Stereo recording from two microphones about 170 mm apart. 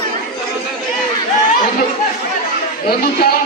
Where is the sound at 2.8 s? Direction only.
65° left (ahead or behind).